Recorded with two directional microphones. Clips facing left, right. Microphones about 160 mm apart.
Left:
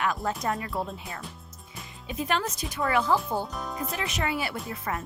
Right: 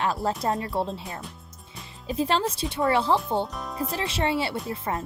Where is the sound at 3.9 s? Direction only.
30° right (ahead or behind).